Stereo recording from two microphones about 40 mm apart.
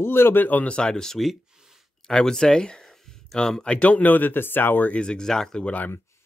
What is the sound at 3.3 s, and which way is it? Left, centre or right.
Speech, centre.